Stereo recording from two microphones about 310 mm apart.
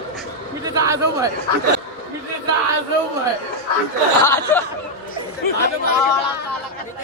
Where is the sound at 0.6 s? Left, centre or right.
Centre.